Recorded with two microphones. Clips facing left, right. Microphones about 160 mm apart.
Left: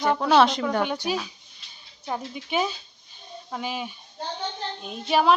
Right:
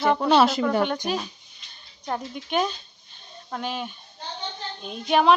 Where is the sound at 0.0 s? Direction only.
5° right (ahead or behind).